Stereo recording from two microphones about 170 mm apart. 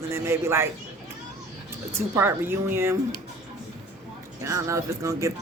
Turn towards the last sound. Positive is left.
turn(degrees=-15)  # may be behind; listen again after turning